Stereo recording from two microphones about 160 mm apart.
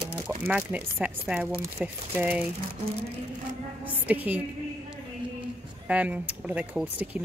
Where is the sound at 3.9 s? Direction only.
10° right (ahead or behind).